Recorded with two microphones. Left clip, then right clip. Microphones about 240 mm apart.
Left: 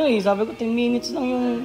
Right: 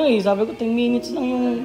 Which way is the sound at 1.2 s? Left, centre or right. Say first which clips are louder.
Right 1 dB; left.